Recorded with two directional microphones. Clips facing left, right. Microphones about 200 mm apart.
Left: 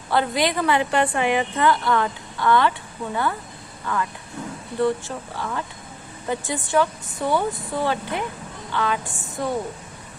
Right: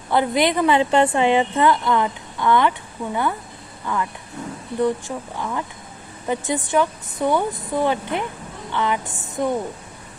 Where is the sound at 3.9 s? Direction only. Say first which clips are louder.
Right 1 dB; 20° right (ahead or behind).